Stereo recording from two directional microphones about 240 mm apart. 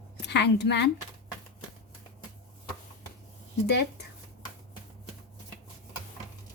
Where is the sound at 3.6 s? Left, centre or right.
Left.